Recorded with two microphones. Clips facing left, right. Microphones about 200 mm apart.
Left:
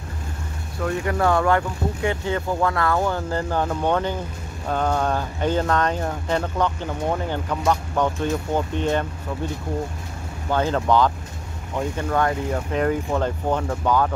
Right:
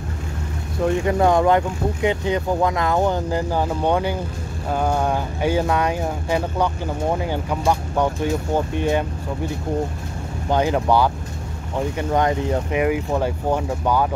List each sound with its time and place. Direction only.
0.8 s speech: 20° right (ahead or behind)
10.5 s speech: 15° right (ahead or behind)